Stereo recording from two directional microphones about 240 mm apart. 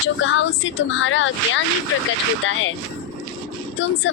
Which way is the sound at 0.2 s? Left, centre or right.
Left.